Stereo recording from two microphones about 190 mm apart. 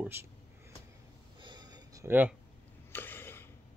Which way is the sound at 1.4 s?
20° right (ahead or behind).